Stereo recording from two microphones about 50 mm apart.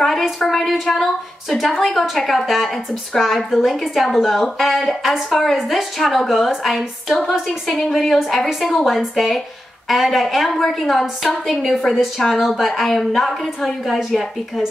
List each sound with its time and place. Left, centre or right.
0.4 s a woman's voice: centre